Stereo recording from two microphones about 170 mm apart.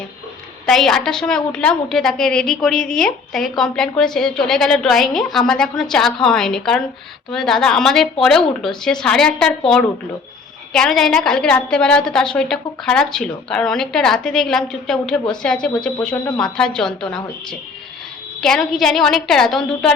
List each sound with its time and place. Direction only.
0.6 s a woman's voice: centre (ahead or behind)